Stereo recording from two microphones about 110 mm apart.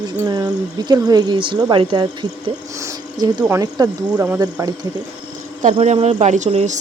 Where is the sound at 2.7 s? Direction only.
25° right (ahead or behind).